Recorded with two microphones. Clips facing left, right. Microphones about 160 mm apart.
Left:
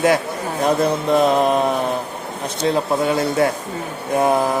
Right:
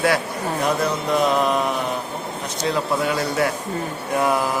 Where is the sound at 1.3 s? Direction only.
25° left (ahead or behind).